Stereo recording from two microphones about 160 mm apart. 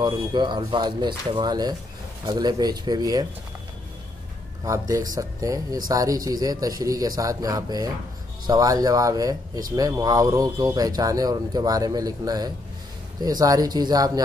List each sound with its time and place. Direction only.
0.0 s speech: 30° right (ahead or behind)
4.6 s speech: 20° right (ahead or behind)